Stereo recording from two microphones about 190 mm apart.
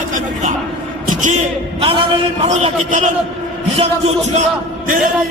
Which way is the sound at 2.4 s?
40° right (ahead or behind).